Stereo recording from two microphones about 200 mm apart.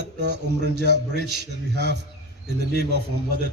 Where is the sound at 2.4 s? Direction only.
55° right (ahead or behind).